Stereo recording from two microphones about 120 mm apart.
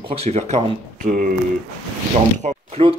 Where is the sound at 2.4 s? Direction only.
90° right.